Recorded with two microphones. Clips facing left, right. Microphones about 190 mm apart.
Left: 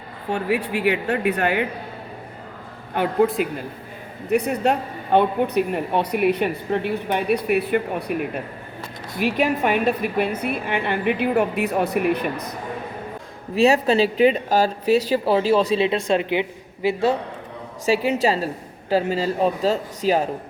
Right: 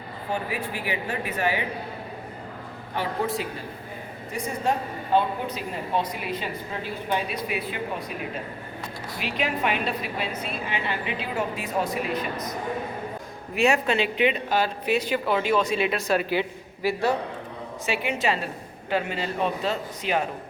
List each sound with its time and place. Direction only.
0.3 s speech: 70° left (ahead or behind)
2.9 s a woman's voice: 55° left (ahead or behind)
4.3 s a woman's voice: 65° left (ahead or behind)
9.1 s a woman's voice: 50° left (ahead or behind)
13.6 s a woman's voice: 35° left (ahead or behind)
17.8 s a woman's voice: 40° left (ahead or behind)